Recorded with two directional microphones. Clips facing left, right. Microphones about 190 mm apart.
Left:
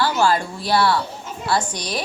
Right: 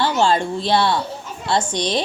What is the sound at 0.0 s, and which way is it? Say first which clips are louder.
A woman's voice: right 1 dB; 25° right (ahead or behind).